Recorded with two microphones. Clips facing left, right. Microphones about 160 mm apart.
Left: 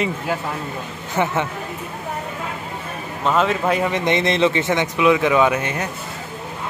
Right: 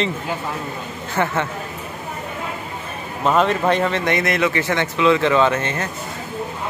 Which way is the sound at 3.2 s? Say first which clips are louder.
Right 2 dB; centre (ahead or behind).